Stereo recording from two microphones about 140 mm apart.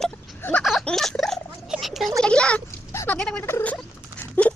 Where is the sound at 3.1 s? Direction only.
10° left (ahead or behind).